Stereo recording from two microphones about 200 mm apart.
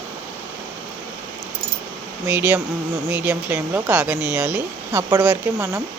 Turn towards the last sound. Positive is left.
turn(degrees=-10)  # may be behind; listen again after turning